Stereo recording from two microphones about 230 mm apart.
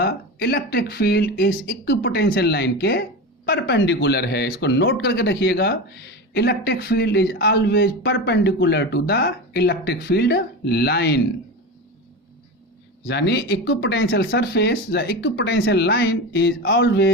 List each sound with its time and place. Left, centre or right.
0.0 s speech: left
13.1 s speech: left